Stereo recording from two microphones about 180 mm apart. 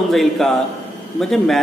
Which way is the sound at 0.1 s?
Centre (ahead or behind).